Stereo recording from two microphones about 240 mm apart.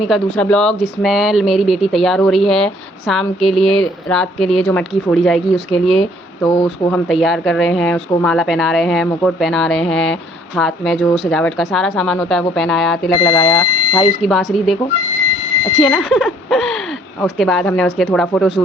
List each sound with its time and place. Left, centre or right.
0.0 s speech: centre
6.5 s speech: centre
6.9 s speech: centre
14.0 s speech: centre
15.8 s speech: centre